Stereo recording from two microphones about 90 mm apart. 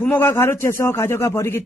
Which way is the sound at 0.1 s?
25° left (ahead or behind).